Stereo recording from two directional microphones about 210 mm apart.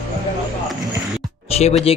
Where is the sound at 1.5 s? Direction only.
30° left (ahead or behind).